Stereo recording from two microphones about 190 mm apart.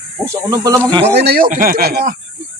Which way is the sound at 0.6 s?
20° right (ahead or behind).